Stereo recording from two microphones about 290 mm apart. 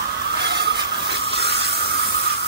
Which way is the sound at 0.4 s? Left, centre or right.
Right.